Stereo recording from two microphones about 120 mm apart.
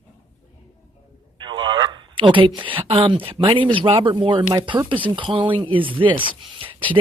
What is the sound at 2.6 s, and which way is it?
Speech, 45° right (ahead or behind).